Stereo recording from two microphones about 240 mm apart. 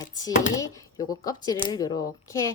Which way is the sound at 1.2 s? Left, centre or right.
Centre.